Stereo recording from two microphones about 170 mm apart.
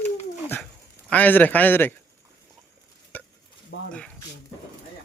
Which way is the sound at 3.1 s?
10° left (ahead or behind).